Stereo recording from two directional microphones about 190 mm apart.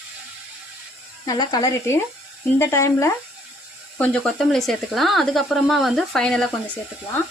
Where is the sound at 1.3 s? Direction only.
20° left (ahead or behind).